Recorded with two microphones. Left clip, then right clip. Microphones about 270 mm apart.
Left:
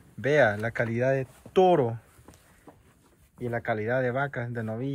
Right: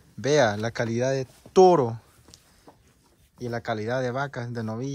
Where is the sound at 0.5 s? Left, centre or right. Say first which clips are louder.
Right 1 dB; right.